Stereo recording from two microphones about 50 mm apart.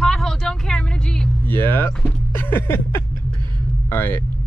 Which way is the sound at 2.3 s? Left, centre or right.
Left.